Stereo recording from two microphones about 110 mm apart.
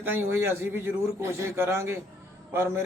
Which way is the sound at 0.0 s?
20° right (ahead or behind).